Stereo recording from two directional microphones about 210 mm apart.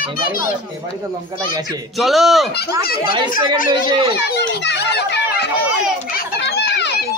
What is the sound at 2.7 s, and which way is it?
Speech, 20° right (ahead or behind).